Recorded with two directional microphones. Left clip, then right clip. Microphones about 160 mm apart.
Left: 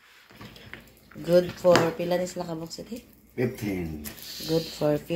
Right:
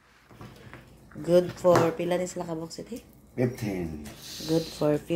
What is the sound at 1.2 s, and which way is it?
Speech, 5° right (ahead or behind).